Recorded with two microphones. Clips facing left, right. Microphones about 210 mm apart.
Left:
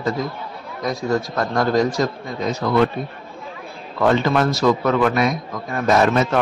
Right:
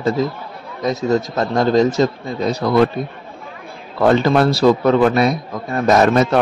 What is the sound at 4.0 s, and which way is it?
A man's voice, 35° right (ahead or behind).